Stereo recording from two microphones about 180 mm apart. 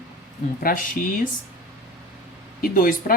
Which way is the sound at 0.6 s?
50° left (ahead or behind).